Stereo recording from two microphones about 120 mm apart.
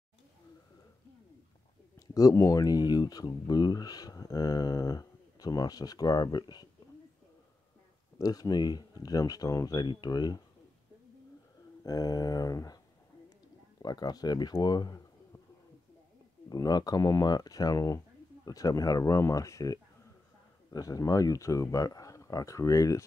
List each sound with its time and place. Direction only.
2.0 s speech: 30° left (ahead or behind)
8.2 s speech: 30° left (ahead or behind)
11.8 s speech: 30° left (ahead or behind)
13.8 s speech: 35° left (ahead or behind)
16.4 s speech: 35° left (ahead or behind)